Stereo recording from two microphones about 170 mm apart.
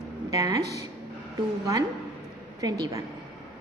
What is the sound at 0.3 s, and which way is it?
Speech, 20° right (ahead or behind).